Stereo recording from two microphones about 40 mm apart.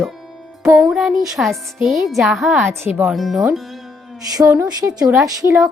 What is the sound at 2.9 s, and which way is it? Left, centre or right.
Speech, centre.